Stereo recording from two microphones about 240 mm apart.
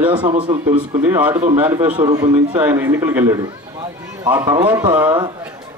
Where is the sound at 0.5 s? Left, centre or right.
Centre.